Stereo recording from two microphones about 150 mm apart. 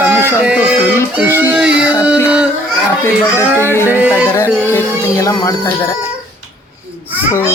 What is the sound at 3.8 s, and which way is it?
Music, 15° right (ahead or behind).